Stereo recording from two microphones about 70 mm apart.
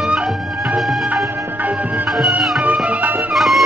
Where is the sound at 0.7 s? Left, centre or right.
Centre.